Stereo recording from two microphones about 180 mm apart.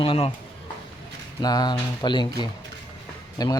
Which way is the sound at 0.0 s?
30° left (ahead or behind).